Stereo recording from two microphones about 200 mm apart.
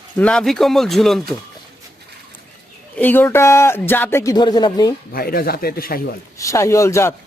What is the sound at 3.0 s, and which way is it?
Speech, 10° left (ahead or behind).